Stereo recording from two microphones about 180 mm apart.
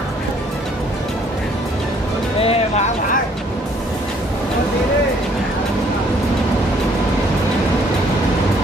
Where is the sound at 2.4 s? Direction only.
35° left (ahead or behind).